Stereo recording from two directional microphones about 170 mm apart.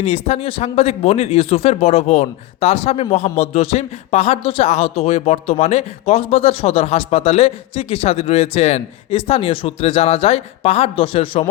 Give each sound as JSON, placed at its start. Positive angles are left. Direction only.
{"t": 0.0, "sound": "a man's voice", "side_deg": 35}